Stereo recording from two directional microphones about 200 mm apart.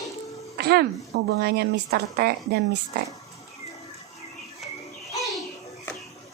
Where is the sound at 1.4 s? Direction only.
55° right (ahead or behind).